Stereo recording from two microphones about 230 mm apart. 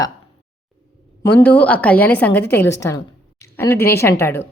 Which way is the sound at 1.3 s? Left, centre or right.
Centre.